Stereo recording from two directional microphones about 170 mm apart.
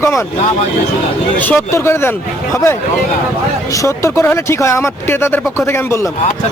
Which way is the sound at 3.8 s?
15° left (ahead or behind).